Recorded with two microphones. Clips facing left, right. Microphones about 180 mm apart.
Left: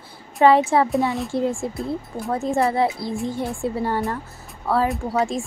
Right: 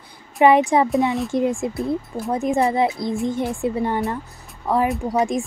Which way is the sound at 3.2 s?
20° right (ahead or behind).